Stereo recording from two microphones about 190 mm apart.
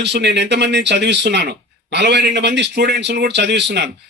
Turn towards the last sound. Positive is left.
turn(degrees=-65)  # may be behind; listen again after turning